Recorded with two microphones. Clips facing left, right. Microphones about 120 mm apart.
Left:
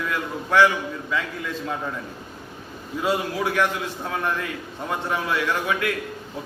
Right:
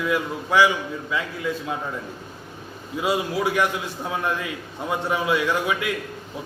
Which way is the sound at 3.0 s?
15° right (ahead or behind).